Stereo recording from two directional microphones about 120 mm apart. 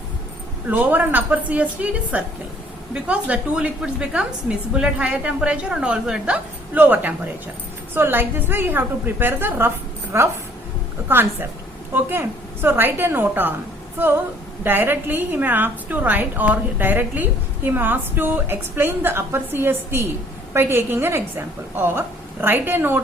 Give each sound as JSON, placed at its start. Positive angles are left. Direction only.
{"t": 0.7, "sound": "a woman's voice", "side_deg": -15}